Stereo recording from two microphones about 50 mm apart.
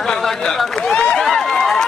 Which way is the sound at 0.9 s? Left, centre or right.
Centre.